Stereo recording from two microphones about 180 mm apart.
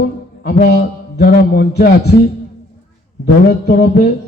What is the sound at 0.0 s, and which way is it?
A man's voice, 60° left (ahead or behind).